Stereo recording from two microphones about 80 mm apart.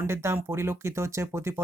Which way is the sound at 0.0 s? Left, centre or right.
Right.